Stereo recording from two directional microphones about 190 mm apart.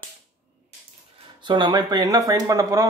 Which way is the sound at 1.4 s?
25° right (ahead or behind).